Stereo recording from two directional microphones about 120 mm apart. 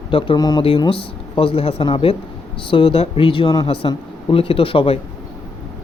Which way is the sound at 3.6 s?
50° left (ahead or behind).